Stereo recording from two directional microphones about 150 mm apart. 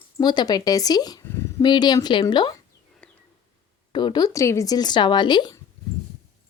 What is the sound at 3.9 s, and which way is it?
Speech, 30° left (ahead or behind).